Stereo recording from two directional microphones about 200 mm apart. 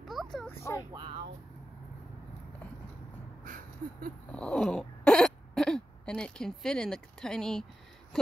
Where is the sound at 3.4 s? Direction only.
45° right (ahead or behind).